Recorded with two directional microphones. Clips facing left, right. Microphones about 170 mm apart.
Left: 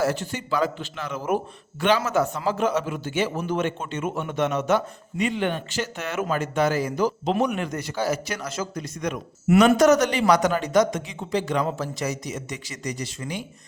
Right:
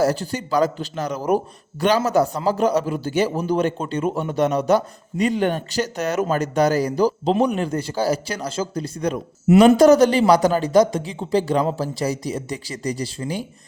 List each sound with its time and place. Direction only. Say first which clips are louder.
0.0 s a man's voice: right 4 dB; 35° right (ahead or behind)